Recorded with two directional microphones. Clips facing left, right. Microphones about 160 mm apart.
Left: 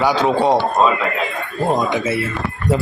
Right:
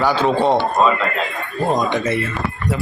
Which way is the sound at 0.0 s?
10° left (ahead or behind).